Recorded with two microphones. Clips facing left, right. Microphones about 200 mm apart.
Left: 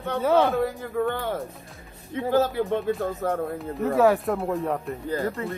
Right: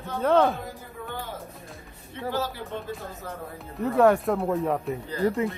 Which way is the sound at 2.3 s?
55° left (ahead or behind).